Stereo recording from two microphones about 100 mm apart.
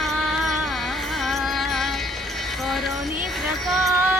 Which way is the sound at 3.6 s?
Centre (ahead or behind).